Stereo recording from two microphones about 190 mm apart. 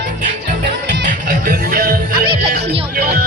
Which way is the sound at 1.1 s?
45° right (ahead or behind).